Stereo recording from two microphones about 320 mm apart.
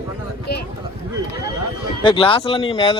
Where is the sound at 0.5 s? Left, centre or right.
Left.